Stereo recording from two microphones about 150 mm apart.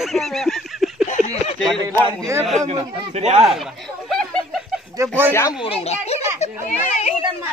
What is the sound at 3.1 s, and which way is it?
Speech, 45° right (ahead or behind).